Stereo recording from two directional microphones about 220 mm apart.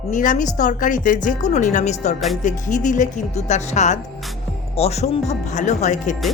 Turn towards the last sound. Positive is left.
turn(degrees=30)  # may be behind; listen again after turning